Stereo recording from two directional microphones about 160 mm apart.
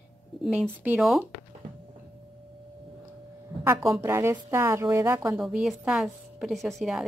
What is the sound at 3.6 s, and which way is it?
A woman's voice, 15° right (ahead or behind).